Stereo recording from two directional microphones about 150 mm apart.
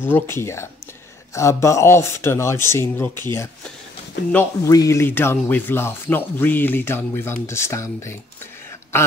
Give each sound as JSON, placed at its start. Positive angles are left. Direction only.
{"t": 0.0, "sound": "speech", "side_deg": 15}